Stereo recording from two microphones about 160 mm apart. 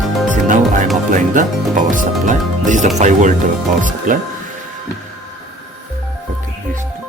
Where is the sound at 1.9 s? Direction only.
55° right (ahead or behind).